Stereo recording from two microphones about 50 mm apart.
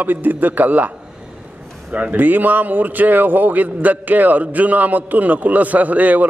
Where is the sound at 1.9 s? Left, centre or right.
Right.